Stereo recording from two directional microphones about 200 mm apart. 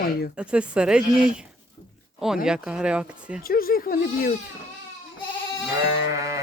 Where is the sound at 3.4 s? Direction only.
45° left (ahead or behind).